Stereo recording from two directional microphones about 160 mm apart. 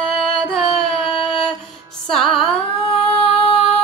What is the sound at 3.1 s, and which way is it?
Female singing, 35° left (ahead or behind).